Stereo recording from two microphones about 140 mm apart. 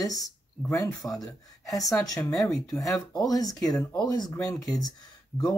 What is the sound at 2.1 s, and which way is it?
Speech, 25° left (ahead or behind).